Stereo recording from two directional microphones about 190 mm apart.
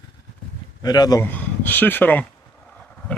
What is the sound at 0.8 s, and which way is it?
Speech, 20° left (ahead or behind).